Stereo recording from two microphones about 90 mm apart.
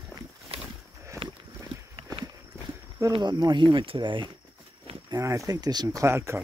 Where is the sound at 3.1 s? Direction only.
55° right (ahead or behind).